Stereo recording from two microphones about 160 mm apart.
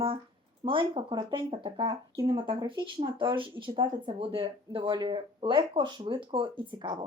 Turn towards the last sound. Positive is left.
turn(degrees=-30)  # may be behind; listen again after turning